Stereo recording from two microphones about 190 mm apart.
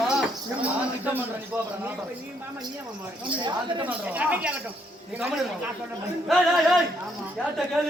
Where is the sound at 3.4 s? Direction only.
25° right (ahead or behind).